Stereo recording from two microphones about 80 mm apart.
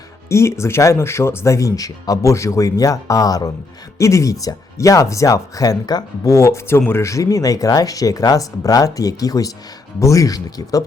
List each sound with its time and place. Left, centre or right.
0.3 s speech: left
3.9 s speech: left
6.3 s speech: left